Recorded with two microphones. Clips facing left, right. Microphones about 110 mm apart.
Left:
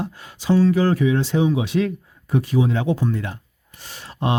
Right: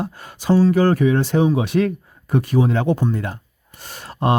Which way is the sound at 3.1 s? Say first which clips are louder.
Right 2 dB; 45° right (ahead or behind).